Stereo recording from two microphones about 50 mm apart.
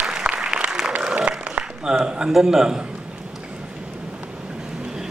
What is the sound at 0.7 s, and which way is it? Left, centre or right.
Applause, centre.